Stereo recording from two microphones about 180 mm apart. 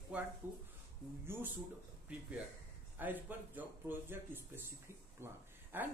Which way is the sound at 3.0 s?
10° right (ahead or behind).